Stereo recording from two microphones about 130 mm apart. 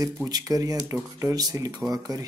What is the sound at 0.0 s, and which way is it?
Speech, 30° right (ahead or behind).